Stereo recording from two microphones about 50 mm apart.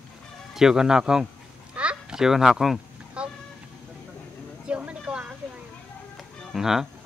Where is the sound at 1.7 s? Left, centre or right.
Right.